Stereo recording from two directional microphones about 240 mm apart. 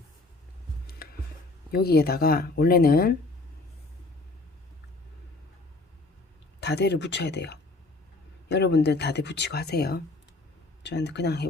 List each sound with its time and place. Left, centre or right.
1.7 s speech: left
6.6 s speech: left